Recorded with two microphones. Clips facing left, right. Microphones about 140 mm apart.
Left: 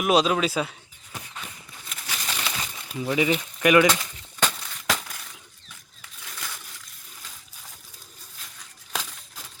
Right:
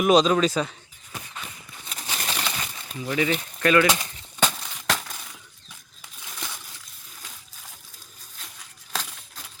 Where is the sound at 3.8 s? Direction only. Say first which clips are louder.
Left 1 dB; 15° right (ahead or behind).